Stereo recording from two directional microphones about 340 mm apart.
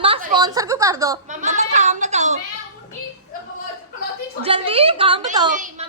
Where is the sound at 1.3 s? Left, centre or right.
Right.